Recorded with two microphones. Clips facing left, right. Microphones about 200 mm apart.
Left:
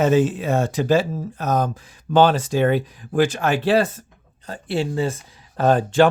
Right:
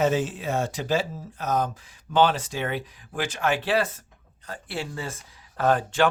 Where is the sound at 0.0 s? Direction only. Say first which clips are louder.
Left 6 dB; 55° left (ahead or behind).